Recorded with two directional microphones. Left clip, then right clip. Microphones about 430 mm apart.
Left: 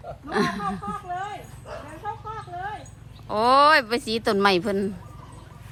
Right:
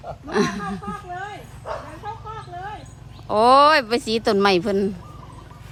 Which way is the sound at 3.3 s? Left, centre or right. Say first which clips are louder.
Right 3 dB; centre.